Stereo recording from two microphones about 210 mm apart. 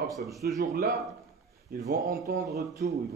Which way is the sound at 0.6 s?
45° right (ahead or behind).